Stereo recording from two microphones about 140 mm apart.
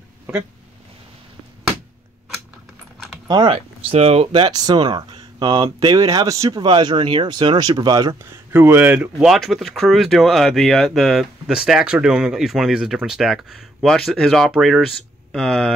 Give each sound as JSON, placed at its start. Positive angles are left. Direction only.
{"t": 3.3, "sound": "speech", "side_deg": -35}
{"t": 4.5, "sound": "speech", "side_deg": -30}
{"t": 8.5, "sound": "speech", "side_deg": -15}